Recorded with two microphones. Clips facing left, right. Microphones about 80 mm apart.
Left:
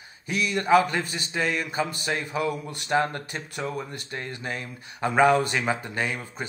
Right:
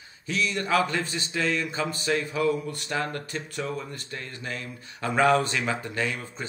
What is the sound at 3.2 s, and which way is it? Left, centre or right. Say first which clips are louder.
Speech: even; centre.